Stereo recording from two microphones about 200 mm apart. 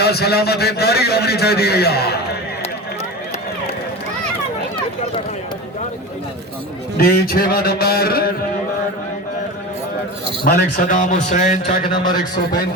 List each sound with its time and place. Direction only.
0.0 s a man's voice: 55° left (ahead or behind)
6.9 s a man's voice: 50° left (ahead or behind)
10.4 s a man's voice: 45° left (ahead or behind); by 12.1 s 25° left (ahead or behind)